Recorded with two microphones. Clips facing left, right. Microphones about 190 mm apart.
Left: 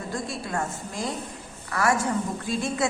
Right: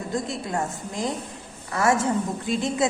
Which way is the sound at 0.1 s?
20° right (ahead or behind).